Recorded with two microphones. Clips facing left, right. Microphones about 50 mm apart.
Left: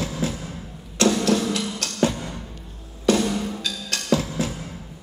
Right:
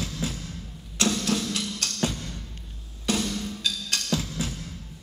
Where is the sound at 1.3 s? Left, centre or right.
Centre.